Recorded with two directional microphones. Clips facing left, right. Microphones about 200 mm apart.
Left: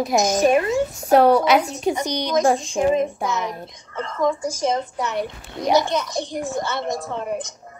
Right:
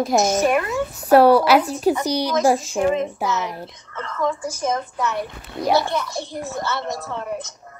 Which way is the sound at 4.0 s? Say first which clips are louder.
Left 2 dB; 15° left (ahead or behind).